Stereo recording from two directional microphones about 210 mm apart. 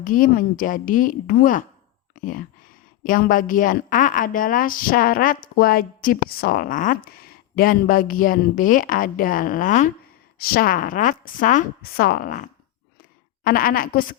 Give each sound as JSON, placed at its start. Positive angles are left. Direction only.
{"t": 0.0, "sound": "a woman's voice", "side_deg": 40}